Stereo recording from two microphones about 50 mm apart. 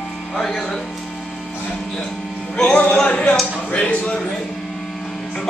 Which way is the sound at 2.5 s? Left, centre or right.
Centre.